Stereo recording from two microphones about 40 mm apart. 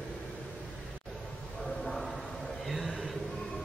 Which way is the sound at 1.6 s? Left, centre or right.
Centre.